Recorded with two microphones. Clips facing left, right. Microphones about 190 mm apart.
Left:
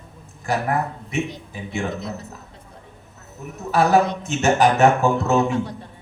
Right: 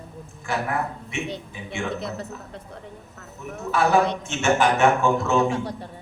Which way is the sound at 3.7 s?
40° left (ahead or behind).